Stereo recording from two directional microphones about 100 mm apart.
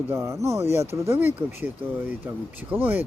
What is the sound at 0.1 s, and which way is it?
Speech, 30° right (ahead or behind).